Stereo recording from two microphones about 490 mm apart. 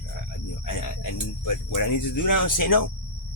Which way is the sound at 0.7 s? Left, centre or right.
Left.